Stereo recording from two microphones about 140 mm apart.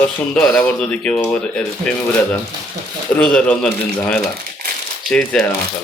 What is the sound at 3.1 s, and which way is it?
Speech, 5° left (ahead or behind).